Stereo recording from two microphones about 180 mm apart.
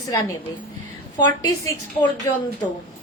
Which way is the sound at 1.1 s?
20° left (ahead or behind).